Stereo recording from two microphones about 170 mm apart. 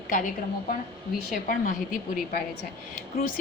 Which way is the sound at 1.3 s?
55° left (ahead or behind).